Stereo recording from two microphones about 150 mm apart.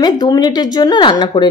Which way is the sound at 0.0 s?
30° left (ahead or behind).